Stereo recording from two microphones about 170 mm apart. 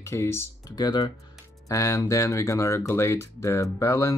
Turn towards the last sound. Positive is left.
turn(degrees=15)  # may be behind; listen again after turning